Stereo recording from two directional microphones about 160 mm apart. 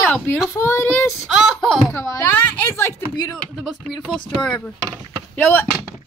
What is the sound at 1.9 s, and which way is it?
Speech, 20° left (ahead or behind).